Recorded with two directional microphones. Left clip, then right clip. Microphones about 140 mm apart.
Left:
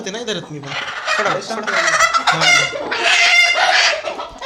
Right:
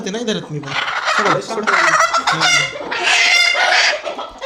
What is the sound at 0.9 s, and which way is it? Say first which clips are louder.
Fowl: right 2 dB; 25° right (ahead or behind).